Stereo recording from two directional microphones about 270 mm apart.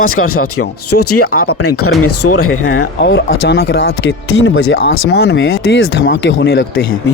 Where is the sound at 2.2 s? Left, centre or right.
Left.